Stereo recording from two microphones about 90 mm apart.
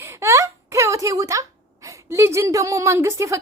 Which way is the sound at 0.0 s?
30° right (ahead or behind).